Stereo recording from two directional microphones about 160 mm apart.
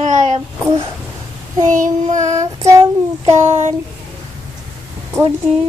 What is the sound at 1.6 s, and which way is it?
Child singing, 50° right (ahead or behind).